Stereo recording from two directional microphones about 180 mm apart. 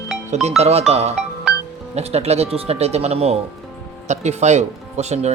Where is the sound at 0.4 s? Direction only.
35° right (ahead or behind).